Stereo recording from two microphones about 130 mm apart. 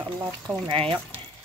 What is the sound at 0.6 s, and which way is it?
Speech, 40° right (ahead or behind).